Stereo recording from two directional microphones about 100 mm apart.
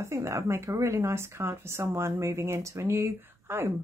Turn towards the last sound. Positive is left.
turn(degrees=-25)  # may be behind; listen again after turning